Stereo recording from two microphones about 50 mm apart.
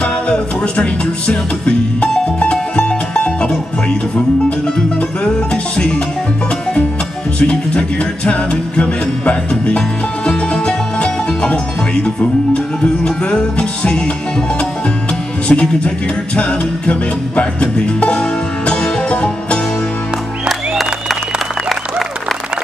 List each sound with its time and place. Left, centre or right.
0.0 s music: left
4.7 s music: centre
7.3 s music: left
15.4 s speech: left
16.3 s music: left
20.4 s music: centre